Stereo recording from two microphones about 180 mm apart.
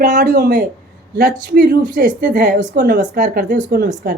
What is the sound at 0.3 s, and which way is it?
Speech, 65° right (ahead or behind).